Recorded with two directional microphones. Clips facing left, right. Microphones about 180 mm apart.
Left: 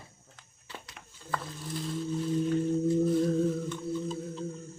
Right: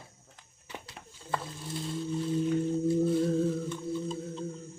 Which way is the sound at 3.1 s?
Centre (ahead or behind).